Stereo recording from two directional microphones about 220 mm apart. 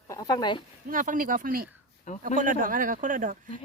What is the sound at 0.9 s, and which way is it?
Speech, 35° right (ahead or behind).